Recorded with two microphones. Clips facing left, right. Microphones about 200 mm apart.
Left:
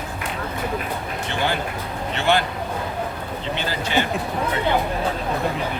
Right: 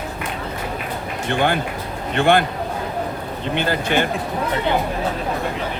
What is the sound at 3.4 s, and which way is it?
Speech, 55° right (ahead or behind).